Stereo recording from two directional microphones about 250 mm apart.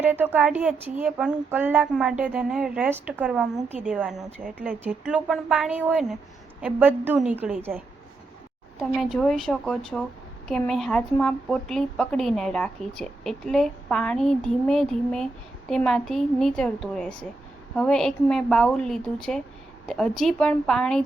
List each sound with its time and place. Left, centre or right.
0.0 s a woman's voice: centre
8.8 s speech: centre